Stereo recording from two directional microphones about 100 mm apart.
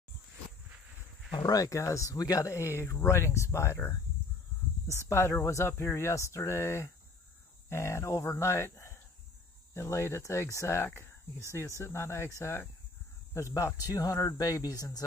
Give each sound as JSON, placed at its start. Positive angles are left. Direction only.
{"t": 1.3, "sound": "speech", "side_deg": 35}
{"t": 4.9, "sound": "speech", "side_deg": 25}